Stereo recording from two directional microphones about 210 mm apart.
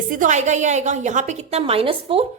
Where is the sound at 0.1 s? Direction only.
35° right (ahead or behind).